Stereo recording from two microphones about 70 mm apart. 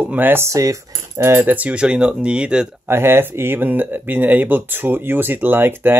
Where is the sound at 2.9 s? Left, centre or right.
Right.